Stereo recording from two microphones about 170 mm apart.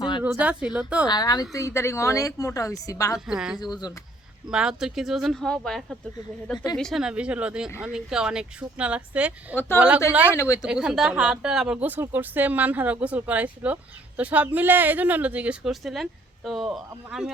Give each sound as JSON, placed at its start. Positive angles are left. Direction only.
{"t": 0.2, "sound": "speech", "side_deg": -10}
{"t": 1.0, "sound": "speech", "side_deg": 25}
{"t": 3.2, "sound": "speech", "side_deg": -5}
{"t": 3.6, "sound": "speech", "side_deg": 25}
{"t": 4.4, "sound": "speech", "side_deg": -5}
{"t": 9.6, "sound": "speech", "side_deg": 15}
{"t": 10.7, "sound": "speech", "side_deg": -5}